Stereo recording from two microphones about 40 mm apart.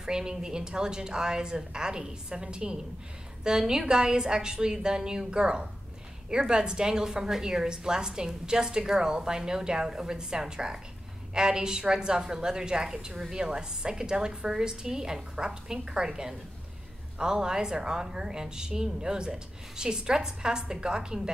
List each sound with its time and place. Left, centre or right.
0.0 s a woman's voice: centre